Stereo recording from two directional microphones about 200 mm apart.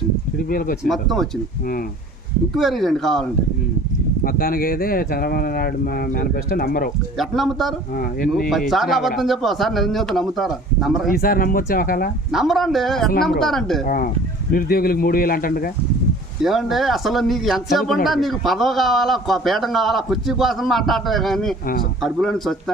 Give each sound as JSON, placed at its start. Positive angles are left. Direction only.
{"t": 0.5, "sound": "speech", "side_deg": 45}
{"t": 0.8, "sound": "a man's voice", "side_deg": 0}
{"t": 2.5, "sound": "a man's voice", "side_deg": 0}
{"t": 4.2, "sound": "speech", "side_deg": 45}
{"t": 7.2, "sound": "a man's voice", "side_deg": 0}
{"t": 11.1, "sound": "speech", "side_deg": 45}
{"t": 12.3, "sound": "a man's voice", "side_deg": 0}
{"t": 13.8, "sound": "speech", "side_deg": 45}
{"t": 16.4, "sound": "a man's voice", "side_deg": 0}